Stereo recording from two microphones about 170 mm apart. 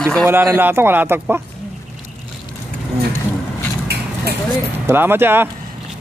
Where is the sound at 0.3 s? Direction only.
10° right (ahead or behind).